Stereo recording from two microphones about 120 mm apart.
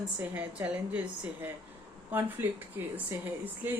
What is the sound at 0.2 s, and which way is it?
Speech, 15° right (ahead or behind).